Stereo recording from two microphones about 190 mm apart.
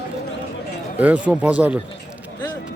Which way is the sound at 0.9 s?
10° right (ahead or behind).